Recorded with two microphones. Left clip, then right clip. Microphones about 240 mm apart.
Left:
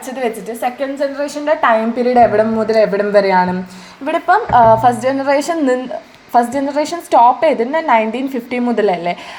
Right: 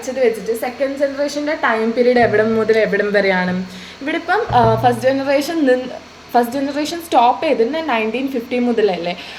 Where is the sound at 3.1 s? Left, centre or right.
Left.